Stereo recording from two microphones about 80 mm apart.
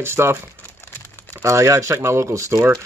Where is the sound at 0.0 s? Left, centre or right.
Right.